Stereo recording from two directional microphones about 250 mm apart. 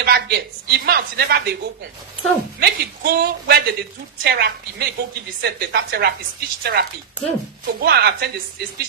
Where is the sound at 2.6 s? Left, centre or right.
Right.